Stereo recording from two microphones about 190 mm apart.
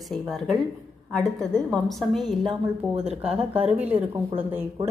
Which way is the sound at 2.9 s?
35° right (ahead or behind).